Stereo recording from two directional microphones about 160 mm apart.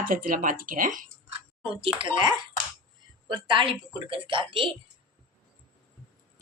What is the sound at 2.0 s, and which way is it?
A woman's voice, 30° right (ahead or behind).